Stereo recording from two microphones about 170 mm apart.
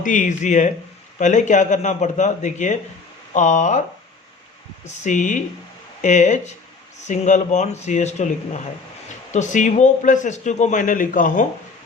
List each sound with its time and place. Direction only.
0.0 s a man's voice: 50° left (ahead or behind)
5.0 s a man's voice: 45° left (ahead or behind)